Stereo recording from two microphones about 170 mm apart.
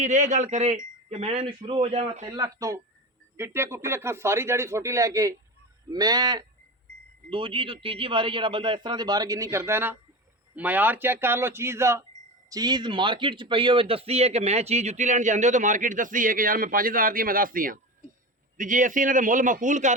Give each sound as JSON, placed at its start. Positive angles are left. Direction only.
{"t": 0.0, "sound": "a man's voice", "side_deg": -45}
{"t": 2.2, "sound": "a man's voice", "side_deg": -20}